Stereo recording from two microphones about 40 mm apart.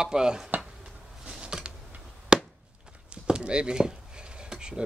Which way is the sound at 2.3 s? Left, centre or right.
Centre.